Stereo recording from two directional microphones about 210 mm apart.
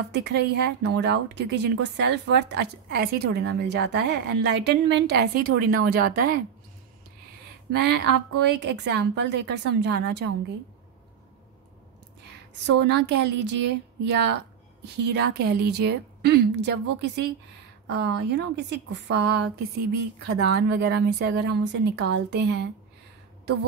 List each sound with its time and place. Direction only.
0.1 s speech: 55° right (ahead or behind)
7.7 s a woman's voice: 55° right (ahead or behind)
12.6 s a woman's voice: 55° right (ahead or behind)